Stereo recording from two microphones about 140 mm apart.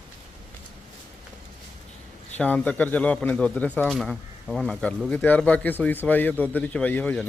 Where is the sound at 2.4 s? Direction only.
10° left (ahead or behind).